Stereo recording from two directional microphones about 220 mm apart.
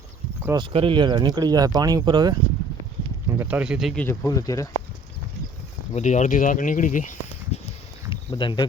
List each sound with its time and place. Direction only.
0.4 s speech: 20° right (ahead or behind)
3.3 s speech: 5° right (ahead or behind); by 4.7 s 15° left (ahead or behind)
5.9 s speech: 30° left (ahead or behind)
7.5 s a sound: 30° left (ahead or behind)